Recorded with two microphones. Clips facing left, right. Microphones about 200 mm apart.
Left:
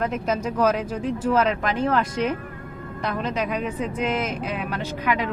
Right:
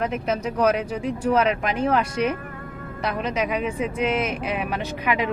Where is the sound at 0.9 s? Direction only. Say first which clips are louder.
Even; 10° right (ahead or behind).